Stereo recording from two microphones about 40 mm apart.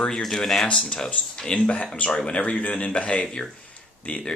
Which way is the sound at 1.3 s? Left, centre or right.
Left.